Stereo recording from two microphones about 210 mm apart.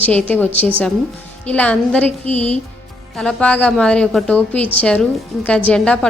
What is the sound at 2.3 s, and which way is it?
Speech, 30° left (ahead or behind).